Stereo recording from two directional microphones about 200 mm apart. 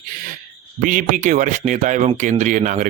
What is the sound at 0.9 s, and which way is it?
Speech, 40° right (ahead or behind).